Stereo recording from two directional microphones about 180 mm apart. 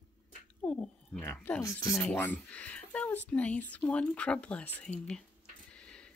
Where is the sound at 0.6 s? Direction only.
5° left (ahead or behind).